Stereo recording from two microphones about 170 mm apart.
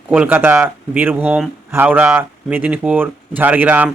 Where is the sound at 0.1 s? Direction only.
10° right (ahead or behind).